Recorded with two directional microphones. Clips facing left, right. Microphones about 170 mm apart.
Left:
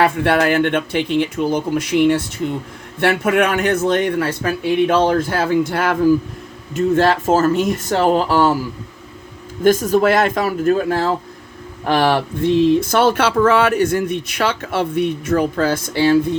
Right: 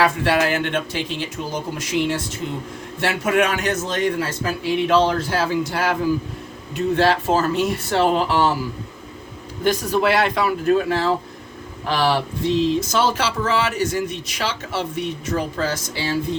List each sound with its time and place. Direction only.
0.0 s speech: 55° left (ahead or behind)
9.6 s speech: 45° left (ahead or behind)